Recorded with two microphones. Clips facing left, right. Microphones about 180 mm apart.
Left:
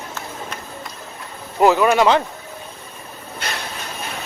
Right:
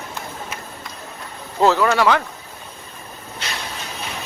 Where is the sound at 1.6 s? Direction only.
15° left (ahead or behind).